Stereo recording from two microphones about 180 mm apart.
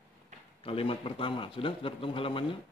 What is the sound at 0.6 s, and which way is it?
A man's voice, 30° left (ahead or behind).